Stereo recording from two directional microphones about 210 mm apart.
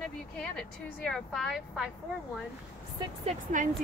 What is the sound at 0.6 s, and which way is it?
Speech, centre (ahead or behind).